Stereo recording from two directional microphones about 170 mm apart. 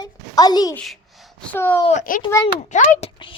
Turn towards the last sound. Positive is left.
turn(degrees=45)  # may be behind; listen again after turning